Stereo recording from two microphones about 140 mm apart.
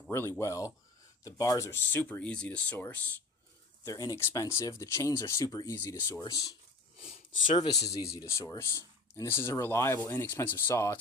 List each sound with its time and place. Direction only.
0.1 s speech: 20° left (ahead or behind)
3.8 s speech: 25° left (ahead or behind)
6.1 s speech: 25° left (ahead or behind)
7.0 s a sound: 80° left
7.6 s speech: 25° left (ahead or behind)